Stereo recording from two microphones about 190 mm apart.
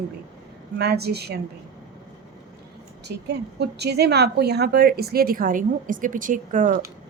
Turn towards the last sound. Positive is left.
turn(degrees=-45)  # may be behind; listen again after turning